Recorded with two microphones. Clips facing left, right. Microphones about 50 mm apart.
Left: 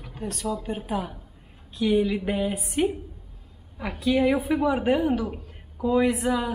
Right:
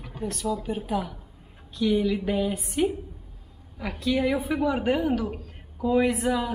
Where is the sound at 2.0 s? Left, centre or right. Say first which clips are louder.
Left 1 dB; centre.